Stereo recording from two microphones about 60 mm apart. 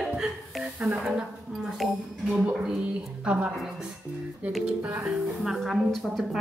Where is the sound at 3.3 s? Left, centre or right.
Centre.